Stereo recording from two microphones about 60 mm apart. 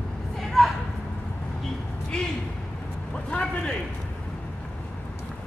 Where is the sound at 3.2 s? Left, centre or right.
Centre.